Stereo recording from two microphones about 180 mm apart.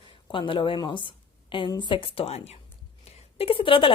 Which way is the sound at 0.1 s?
30° left (ahead or behind).